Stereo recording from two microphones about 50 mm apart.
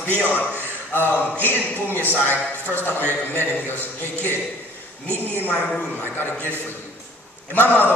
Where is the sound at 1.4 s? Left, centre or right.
Left.